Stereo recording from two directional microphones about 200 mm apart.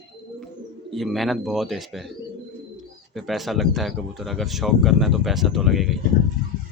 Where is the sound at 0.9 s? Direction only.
Centre (ahead or behind).